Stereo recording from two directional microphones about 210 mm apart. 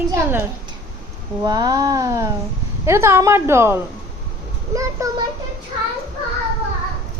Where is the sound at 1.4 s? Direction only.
20° right (ahead or behind).